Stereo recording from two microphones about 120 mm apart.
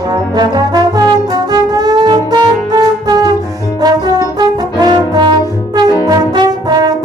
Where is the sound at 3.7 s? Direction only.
35° right (ahead or behind).